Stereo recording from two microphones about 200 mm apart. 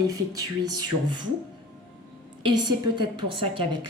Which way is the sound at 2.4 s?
20° right (ahead or behind).